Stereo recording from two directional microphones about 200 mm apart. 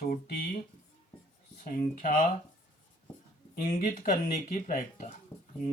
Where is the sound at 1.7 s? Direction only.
45° left (ahead or behind).